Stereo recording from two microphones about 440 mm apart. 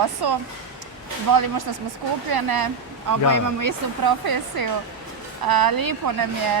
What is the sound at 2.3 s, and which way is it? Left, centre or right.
Speech, right.